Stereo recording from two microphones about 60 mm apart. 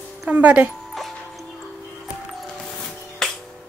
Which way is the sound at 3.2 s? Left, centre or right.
Centre.